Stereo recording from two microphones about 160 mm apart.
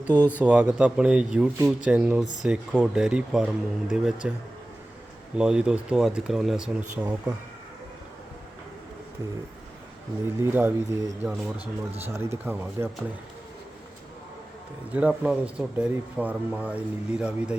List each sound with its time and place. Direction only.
0.0 s speech: 10° right (ahead or behind)
5.4 s speech: 5° right (ahead or behind)
10.4 s speech: 15° right (ahead or behind)
14.9 s speech: 10° right (ahead or behind)